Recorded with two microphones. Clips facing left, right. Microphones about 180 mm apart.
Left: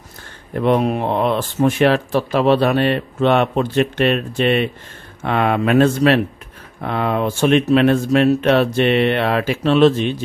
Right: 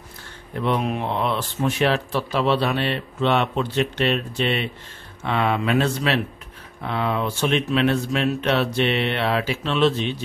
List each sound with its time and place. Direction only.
0.6 s speech: 45° left (ahead or behind)